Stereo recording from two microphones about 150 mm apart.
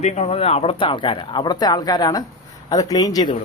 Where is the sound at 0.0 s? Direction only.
45° left (ahead or behind); by 3.2 s 25° left (ahead or behind).